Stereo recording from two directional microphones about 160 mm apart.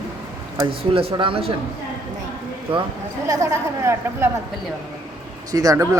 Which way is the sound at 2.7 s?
35° right (ahead or behind).